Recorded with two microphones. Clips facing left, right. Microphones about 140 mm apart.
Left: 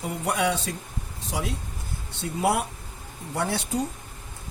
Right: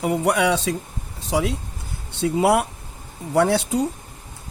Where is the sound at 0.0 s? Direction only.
90° right.